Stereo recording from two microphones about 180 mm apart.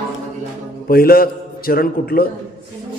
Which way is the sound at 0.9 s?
55° left (ahead or behind).